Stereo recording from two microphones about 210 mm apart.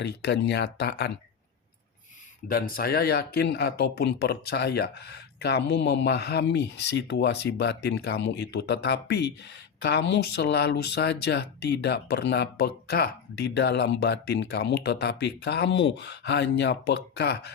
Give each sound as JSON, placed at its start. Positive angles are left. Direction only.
{"t": 0.0, "sound": "speech", "side_deg": 50}
{"t": 2.5, "sound": "speech", "side_deg": 45}